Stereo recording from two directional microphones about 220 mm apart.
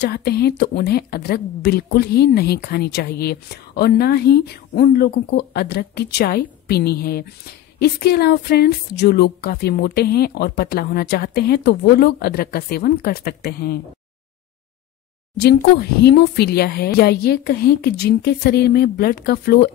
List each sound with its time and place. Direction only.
0.0 s speech: 45° left (ahead or behind)
15.4 s speech: 50° left (ahead or behind)